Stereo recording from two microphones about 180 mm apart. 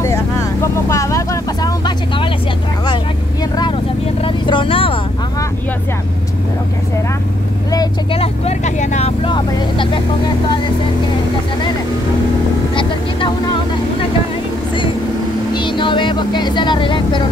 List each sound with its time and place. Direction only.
0.0 s vehicle: 15° left (ahead or behind)
4.2 s vehicle: 30° left (ahead or behind)
7.7 s vehicle: 20° left (ahead or behind)
8.2 s vehicle: 40° left (ahead or behind)
15.5 s vehicle: 25° left (ahead or behind)